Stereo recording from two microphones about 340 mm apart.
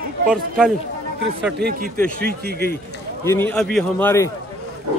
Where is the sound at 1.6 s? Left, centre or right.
Right.